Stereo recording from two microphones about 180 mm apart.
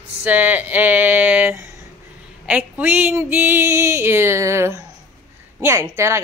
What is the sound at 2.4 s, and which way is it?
Speech, 10° right (ahead or behind).